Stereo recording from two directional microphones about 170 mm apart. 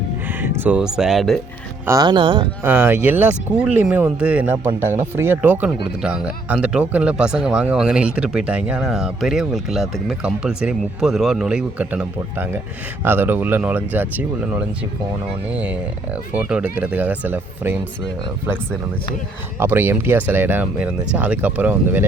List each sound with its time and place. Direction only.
0.4 s speech: 10° right (ahead or behind)
1.9 s speech: 25° right (ahead or behind)
2.6 s speech: 10° right (ahead or behind)
19.5 s speech: 15° right (ahead or behind)